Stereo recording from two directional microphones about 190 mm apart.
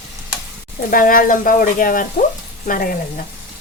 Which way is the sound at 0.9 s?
45° left (ahead or behind).